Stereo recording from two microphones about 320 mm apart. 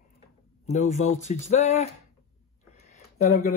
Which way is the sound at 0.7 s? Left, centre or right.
Left.